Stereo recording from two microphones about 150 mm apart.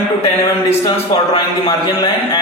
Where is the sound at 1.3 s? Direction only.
30° left (ahead or behind).